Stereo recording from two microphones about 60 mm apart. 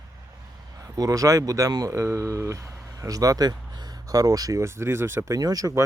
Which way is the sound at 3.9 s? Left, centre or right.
Right.